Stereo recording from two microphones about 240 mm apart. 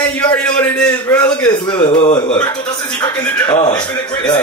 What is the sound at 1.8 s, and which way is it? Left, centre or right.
Speech, left.